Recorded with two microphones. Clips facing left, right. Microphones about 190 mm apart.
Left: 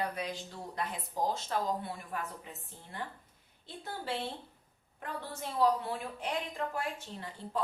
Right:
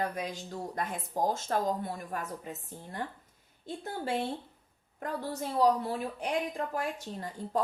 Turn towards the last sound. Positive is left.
turn(degrees=-45)  # may be behind; listen again after turning